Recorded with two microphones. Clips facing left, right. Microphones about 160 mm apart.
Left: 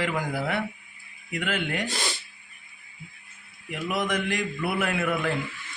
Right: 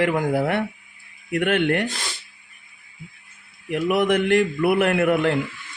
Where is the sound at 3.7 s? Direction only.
60° right (ahead or behind).